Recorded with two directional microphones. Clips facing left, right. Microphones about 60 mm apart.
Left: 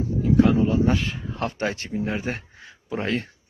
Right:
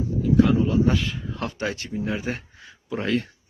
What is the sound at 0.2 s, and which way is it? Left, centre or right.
A man's voice, left.